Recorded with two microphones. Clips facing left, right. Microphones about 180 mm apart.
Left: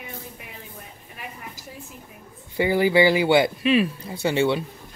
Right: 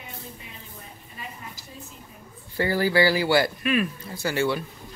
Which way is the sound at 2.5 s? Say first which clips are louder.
Left 3 dB; 15° left (ahead or behind).